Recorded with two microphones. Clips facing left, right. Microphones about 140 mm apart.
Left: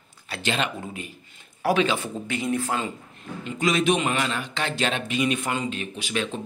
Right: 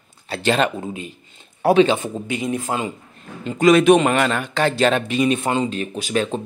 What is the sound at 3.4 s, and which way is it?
Speech, 35° right (ahead or behind).